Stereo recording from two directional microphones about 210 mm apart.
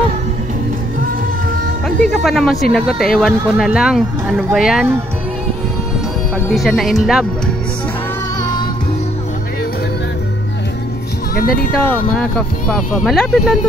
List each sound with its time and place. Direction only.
1.9 s speech: centre (ahead or behind)
6.5 s speech: centre (ahead or behind)
11.3 s speech: 45° left (ahead or behind)
11.9 s speech: 5° left (ahead or behind)